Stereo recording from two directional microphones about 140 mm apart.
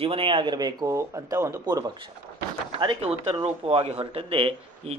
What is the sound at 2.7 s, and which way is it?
Speech, 40° right (ahead or behind).